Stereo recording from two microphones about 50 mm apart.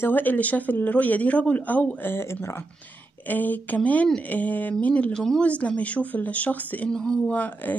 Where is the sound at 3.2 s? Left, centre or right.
Left.